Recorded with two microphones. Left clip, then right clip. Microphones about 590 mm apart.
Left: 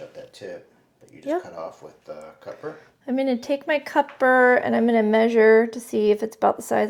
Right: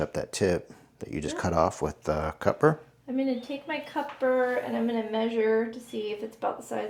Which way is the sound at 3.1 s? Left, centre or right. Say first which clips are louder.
Left 7 dB; left.